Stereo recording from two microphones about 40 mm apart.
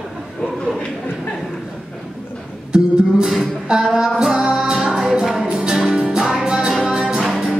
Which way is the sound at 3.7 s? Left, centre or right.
Right.